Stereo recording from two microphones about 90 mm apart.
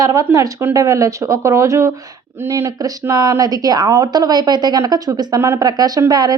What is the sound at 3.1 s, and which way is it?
A woman's voice, 45° right (ahead or behind).